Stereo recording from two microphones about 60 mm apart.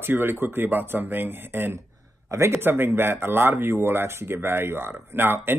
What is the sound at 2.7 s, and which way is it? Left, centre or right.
Speech, right.